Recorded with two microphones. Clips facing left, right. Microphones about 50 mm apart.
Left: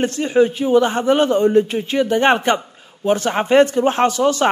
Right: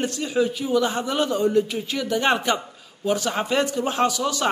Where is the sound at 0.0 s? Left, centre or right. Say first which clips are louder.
Left 7 dB; left.